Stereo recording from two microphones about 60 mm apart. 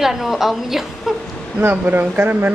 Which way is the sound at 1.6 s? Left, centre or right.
Right.